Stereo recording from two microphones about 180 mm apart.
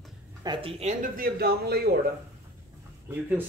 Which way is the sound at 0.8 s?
40° right (ahead or behind).